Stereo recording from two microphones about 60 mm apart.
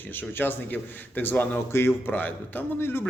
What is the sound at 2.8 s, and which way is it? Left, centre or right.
Speech, left.